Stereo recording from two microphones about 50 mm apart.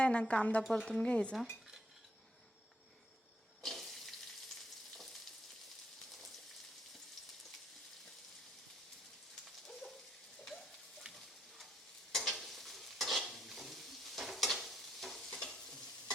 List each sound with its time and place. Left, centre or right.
0.0 s speech: left
3.6 s water tap: centre
6.1 s rain on surface: centre
9.4 s a sound: centre
12.1 s stir: centre